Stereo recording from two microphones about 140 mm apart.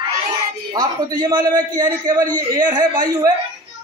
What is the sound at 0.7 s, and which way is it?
A man's voice, 25° right (ahead or behind).